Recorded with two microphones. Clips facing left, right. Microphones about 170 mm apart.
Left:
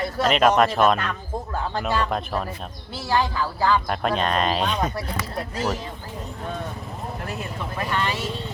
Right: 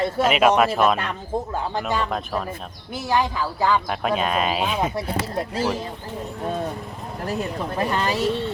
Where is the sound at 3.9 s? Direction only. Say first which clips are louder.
Even; 5° right (ahead or behind).